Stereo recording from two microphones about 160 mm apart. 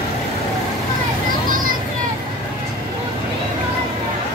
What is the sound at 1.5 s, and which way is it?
Children playing, 60° right (ahead or behind).